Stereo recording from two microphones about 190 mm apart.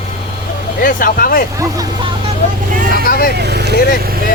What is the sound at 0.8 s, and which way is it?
Speech, 45° left (ahead or behind).